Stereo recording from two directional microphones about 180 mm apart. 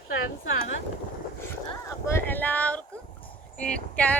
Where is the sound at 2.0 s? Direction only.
10° left (ahead or behind).